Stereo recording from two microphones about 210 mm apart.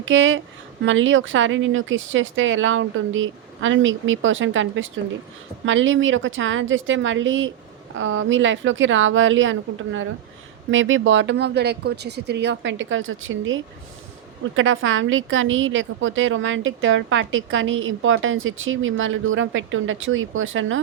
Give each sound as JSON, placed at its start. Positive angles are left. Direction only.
{"t": 0.0, "sound": "a woman's voice", "side_deg": -65}